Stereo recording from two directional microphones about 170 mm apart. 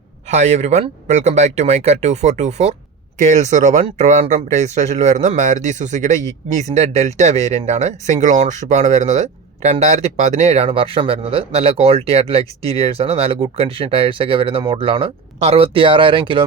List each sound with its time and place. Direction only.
0.3 s speech: 45° right (ahead or behind)